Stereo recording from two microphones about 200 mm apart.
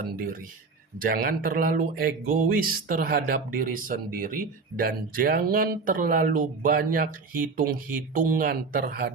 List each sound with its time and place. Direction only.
0.9 s speech: 45° right (ahead or behind)